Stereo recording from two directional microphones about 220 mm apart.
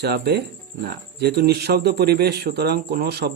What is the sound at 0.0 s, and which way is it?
Speech, 50° right (ahead or behind).